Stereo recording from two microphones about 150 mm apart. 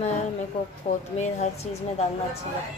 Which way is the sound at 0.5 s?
35° left (ahead or behind).